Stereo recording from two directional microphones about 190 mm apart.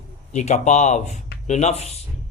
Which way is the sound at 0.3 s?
40° left (ahead or behind).